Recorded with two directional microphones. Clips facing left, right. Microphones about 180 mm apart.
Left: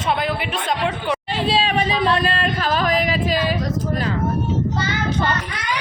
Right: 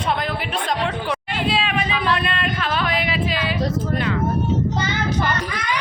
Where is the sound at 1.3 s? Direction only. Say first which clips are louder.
Left 3 dB; 35° left (ahead or behind).